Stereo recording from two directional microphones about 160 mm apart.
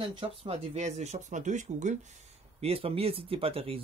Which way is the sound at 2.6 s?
40° right (ahead or behind).